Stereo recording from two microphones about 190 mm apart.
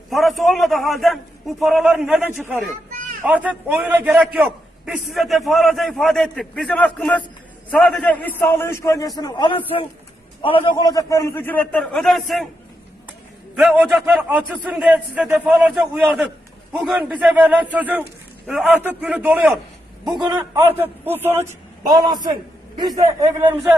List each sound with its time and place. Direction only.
0.1 s a man's voice: centre (ahead or behind)
13.6 s a man's voice: centre (ahead or behind)
20.2 s a man's voice: 20° right (ahead or behind)